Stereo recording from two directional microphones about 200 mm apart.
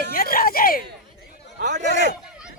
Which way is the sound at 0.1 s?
45° left (ahead or behind).